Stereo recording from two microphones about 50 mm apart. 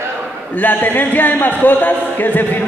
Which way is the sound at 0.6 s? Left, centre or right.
Left.